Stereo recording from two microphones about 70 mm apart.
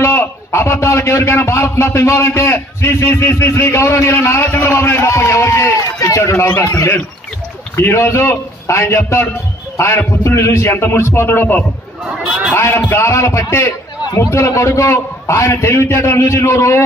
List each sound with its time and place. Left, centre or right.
0.0 s a man's voice: left
7.7 s a man's voice: left